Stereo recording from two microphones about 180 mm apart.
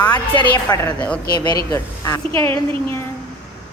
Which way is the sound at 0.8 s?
5° left (ahead or behind).